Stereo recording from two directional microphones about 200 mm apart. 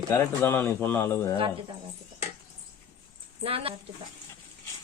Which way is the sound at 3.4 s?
30° right (ahead or behind).